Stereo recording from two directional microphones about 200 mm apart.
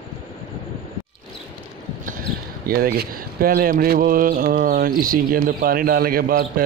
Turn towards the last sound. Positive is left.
turn(degrees=-50)  # may be behind; listen again after turning